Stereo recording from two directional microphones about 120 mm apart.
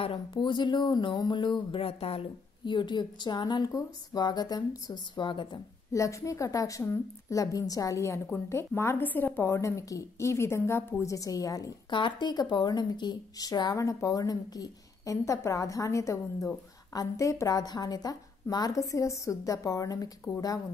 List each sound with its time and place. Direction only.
0.0 s speech: 50° left (ahead or behind)
2.6 s speech: 40° left (ahead or behind)
5.9 s speech: 25° left (ahead or behind)